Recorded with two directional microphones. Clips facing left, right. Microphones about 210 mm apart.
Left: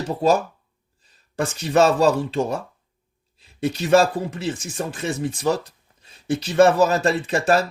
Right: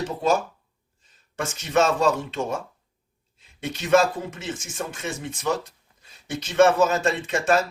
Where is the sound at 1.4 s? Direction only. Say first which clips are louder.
Left 4 dB; 35° left (ahead or behind).